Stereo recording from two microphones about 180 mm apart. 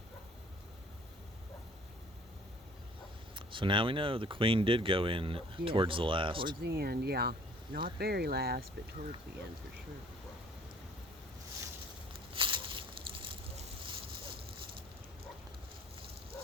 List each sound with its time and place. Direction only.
3.3 s speech: 30° right (ahead or behind)
6.6 s speech: 60° right (ahead or behind)
12.3 s a sound: 30° right (ahead or behind)